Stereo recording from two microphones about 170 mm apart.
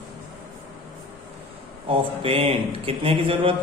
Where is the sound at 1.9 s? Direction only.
35° right (ahead or behind).